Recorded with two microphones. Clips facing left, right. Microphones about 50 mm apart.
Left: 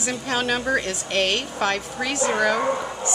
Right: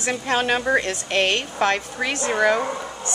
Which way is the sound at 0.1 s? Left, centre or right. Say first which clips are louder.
Right 3 dB; right.